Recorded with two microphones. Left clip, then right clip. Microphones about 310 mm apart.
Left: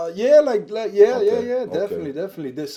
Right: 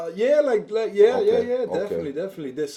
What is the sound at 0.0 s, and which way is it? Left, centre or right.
Speech, left.